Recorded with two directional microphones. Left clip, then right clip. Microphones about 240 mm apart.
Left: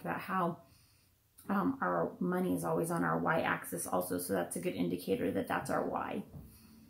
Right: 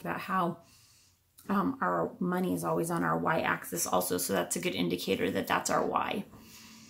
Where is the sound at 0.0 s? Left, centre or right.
Right.